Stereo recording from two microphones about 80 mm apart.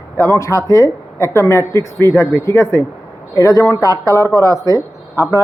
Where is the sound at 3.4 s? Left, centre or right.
Left.